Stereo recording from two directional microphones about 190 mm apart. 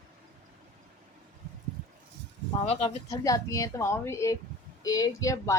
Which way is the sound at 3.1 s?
15° left (ahead or behind).